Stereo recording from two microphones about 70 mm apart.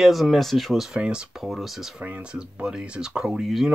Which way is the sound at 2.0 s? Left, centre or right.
Right.